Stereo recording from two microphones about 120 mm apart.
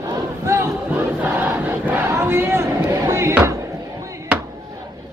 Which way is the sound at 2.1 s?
20° right (ahead or behind).